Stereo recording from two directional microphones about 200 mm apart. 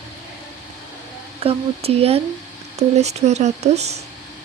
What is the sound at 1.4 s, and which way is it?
A woman's voice, 30° right (ahead or behind).